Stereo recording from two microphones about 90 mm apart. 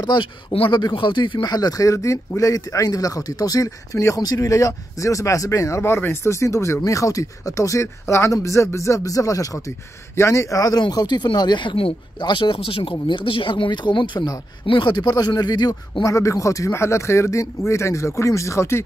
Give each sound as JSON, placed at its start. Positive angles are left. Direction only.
{"t": 0.0, "sound": "speech", "side_deg": 50}
{"t": 0.5, "sound": "speech", "side_deg": 90}
{"t": 0.9, "sound": "speech", "side_deg": 60}
{"t": 12.2, "sound": "speech", "side_deg": 60}
{"t": 16.0, "sound": "speech", "side_deg": 35}